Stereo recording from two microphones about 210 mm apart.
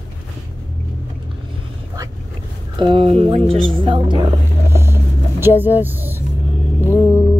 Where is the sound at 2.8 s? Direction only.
25° right (ahead or behind); by 6.2 s 10° right (ahead or behind).